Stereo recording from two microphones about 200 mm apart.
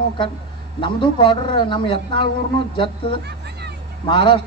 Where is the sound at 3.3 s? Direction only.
55° right (ahead or behind).